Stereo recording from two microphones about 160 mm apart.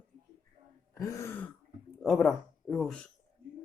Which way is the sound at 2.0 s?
Centre (ahead or behind).